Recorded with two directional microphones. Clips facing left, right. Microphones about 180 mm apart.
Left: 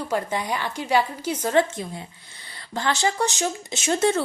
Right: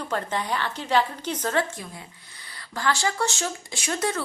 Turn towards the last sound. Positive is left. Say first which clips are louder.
# left 6 dB
turn(degrees=25)  # may be behind; listen again after turning